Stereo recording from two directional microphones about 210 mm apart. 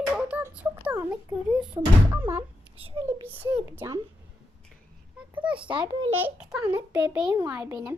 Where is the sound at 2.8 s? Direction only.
25° right (ahead or behind).